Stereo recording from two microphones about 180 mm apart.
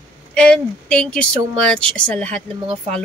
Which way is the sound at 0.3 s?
5° left (ahead or behind).